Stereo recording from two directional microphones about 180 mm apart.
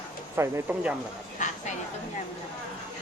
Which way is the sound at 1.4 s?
45° left (ahead or behind).